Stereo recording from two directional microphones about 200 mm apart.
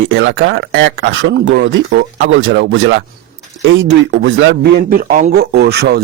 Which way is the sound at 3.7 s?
60° right (ahead or behind).